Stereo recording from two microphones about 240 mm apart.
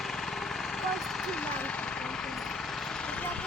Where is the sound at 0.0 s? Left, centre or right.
Centre.